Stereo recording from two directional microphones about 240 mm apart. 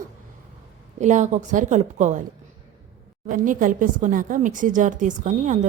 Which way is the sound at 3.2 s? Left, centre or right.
Right.